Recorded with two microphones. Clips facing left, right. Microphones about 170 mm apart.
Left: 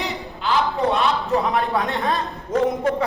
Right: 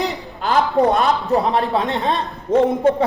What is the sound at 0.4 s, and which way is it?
A man's voice, 40° right (ahead or behind).